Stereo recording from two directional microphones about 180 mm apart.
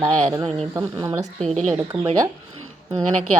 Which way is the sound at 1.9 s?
5° right (ahead or behind).